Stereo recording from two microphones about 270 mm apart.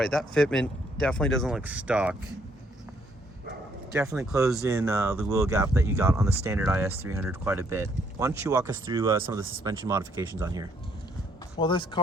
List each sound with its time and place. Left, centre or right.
0.0 s speech: centre
3.9 s speech: centre
11.5 s speech: centre